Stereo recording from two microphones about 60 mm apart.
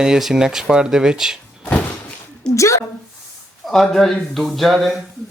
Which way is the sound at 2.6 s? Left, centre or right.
Left.